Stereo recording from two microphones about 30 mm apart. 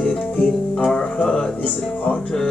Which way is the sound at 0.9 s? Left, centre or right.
Left.